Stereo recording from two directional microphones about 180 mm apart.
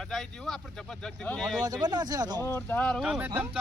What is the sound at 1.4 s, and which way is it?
Speech, 20° right (ahead or behind).